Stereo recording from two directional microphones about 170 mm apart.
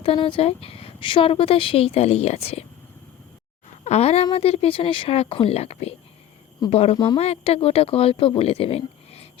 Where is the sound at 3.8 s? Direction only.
40° left (ahead or behind).